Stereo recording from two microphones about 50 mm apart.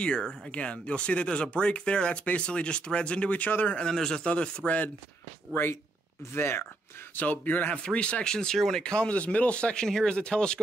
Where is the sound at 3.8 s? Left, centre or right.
Centre.